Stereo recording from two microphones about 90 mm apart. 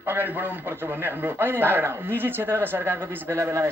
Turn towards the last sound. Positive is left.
turn(degrees=-35)  # may be behind; listen again after turning